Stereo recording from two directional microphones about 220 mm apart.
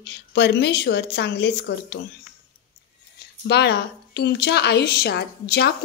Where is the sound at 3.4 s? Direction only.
50° left (ahead or behind).